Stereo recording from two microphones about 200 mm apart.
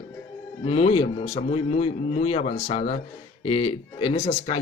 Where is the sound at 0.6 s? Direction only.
30° left (ahead or behind).